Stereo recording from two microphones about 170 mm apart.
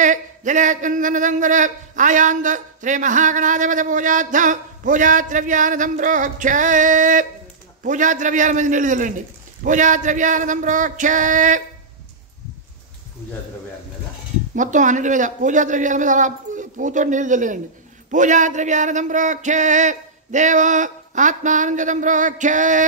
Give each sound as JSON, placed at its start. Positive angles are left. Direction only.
{"t": 0.0, "sound": "speech", "side_deg": -50}
{"t": 14.5, "sound": "speech", "side_deg": -50}